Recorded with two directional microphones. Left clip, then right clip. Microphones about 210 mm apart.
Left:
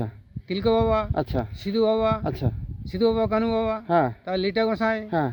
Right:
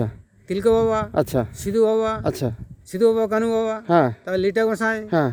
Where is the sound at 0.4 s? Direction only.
15° right (ahead or behind).